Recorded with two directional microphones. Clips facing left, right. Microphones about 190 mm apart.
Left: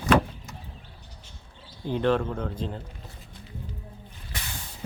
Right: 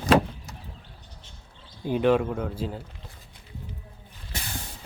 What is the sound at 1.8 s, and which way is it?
Speech, 10° right (ahead or behind).